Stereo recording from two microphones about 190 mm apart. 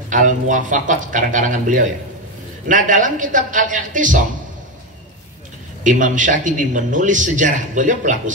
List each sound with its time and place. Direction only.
0.1 s a man's voice: 40° right (ahead or behind)
5.9 s a man's voice: 40° right (ahead or behind)